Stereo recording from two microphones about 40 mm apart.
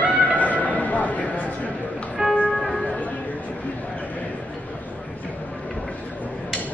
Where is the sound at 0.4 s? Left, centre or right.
Left.